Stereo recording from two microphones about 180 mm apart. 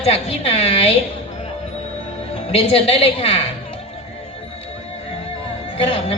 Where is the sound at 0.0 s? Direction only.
35° left (ahead or behind).